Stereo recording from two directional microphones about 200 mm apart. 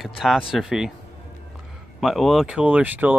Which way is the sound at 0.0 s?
Centre (ahead or behind).